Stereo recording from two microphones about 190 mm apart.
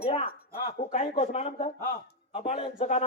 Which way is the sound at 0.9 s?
40° left (ahead or behind).